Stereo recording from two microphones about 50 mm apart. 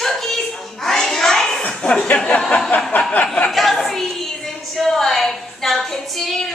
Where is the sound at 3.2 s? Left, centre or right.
Left.